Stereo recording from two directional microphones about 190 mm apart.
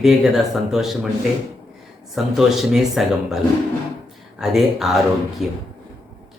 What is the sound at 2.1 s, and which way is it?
A man's voice, centre (ahead or behind).